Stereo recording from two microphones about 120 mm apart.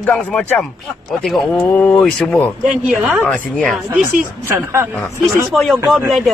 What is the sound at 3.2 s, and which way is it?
Speech, 10° left (ahead or behind).